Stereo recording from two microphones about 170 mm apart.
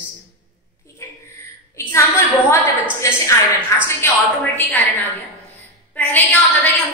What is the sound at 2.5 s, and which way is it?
A woman's voice, 15° left (ahead or behind).